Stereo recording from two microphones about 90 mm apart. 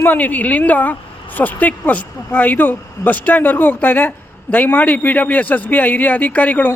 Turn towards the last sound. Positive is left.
turn(degrees=15)  # may be behind; listen again after turning